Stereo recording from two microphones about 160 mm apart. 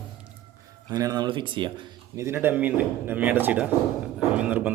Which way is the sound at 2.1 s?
15° right (ahead or behind).